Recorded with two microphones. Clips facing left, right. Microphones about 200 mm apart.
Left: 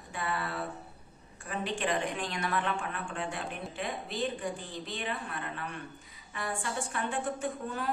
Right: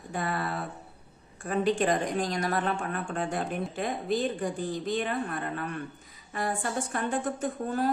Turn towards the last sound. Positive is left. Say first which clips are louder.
# right 5 dB
turn(degrees=-40)  # may be behind; listen again after turning